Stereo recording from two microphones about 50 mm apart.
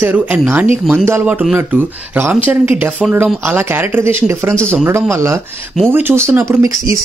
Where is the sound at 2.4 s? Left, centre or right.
Right.